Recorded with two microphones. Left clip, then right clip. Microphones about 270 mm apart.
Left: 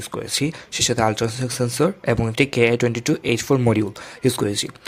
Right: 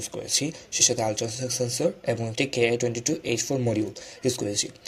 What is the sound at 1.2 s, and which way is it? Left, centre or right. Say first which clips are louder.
Speech: left 4 dB; left.